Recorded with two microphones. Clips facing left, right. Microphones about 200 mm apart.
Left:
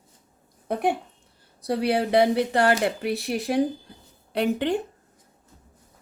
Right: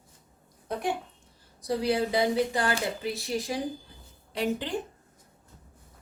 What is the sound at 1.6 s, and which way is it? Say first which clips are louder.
Speech: left 3 dB; 65° left (ahead or behind).